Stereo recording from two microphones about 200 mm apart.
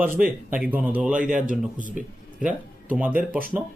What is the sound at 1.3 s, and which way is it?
Speech, 40° right (ahead or behind).